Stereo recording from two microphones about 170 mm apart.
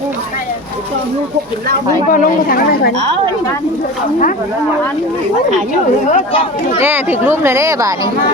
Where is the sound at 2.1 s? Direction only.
55° left (ahead or behind).